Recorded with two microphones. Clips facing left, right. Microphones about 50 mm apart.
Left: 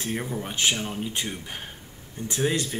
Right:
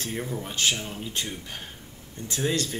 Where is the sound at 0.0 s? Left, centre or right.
Centre.